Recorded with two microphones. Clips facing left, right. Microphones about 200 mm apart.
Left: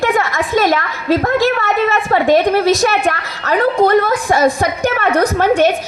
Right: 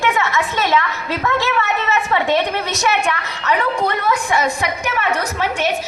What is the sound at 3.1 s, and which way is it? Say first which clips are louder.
A woman's voice: left 3 dB; 40° left (ahead or behind).